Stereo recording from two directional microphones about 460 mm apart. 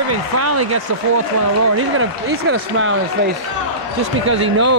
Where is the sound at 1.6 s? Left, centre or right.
Right.